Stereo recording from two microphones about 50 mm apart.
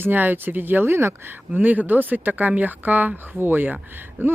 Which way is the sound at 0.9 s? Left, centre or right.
Right.